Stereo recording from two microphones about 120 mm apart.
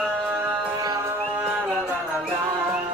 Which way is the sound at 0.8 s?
30° right (ahead or behind).